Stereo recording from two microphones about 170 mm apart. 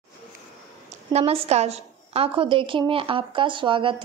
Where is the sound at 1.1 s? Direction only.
40° right (ahead or behind).